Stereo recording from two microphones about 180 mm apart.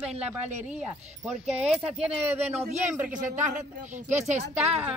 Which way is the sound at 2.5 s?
35° right (ahead or behind).